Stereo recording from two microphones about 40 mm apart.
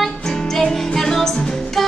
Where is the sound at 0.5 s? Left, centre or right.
Centre.